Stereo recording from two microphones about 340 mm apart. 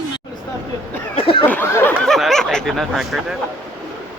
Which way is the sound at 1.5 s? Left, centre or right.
Centre.